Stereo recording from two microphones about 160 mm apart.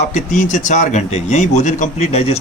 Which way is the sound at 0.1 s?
50° left (ahead or behind).